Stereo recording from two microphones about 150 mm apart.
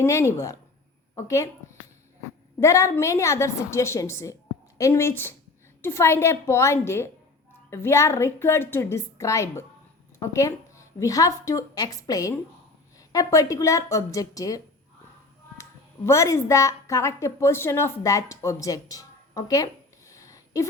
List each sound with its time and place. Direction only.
0.0 s a woman's voice: 20° left (ahead or behind)
2.6 s a woman's voice: 20° left (ahead or behind)
16.0 s a woman's voice: 20° left (ahead or behind)
20.1 s a sound: 20° left (ahead or behind)